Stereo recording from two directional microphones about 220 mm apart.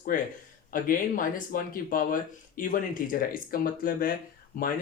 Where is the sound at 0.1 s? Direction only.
40° left (ahead or behind).